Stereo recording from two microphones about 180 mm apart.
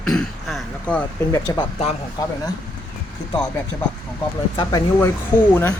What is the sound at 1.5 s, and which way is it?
Speech, 15° left (ahead or behind).